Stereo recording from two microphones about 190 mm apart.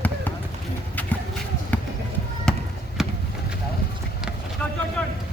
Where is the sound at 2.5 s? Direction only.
5° left (ahead or behind).